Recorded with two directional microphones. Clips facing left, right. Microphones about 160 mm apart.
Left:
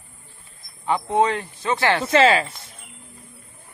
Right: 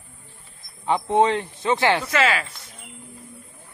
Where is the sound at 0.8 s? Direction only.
20° right (ahead or behind).